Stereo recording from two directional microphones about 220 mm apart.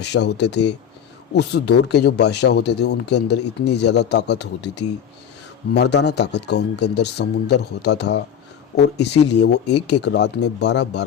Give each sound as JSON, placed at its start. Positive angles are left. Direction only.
{"t": 0.1, "sound": "speech", "side_deg": 50}